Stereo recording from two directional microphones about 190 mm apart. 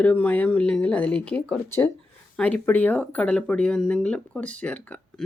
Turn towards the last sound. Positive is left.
turn(degrees=5)  # may be behind; listen again after turning